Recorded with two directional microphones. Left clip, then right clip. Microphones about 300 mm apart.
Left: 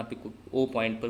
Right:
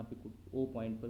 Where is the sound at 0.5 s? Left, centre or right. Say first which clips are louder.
Left 10 dB; left.